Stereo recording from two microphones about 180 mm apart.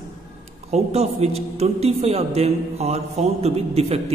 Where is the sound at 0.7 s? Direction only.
35° right (ahead or behind).